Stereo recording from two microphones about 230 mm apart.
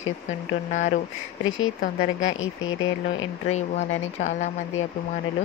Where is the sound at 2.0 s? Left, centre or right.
Left.